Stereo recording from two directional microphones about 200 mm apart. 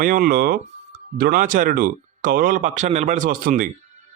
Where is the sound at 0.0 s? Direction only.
45° right (ahead or behind).